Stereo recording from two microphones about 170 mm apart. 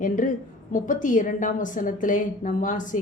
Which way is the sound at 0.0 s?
50° left (ahead or behind).